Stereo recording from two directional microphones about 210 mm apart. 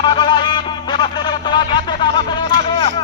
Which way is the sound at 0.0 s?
20° left (ahead or behind).